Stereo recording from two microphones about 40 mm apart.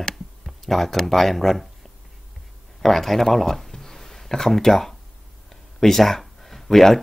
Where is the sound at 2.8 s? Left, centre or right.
Centre.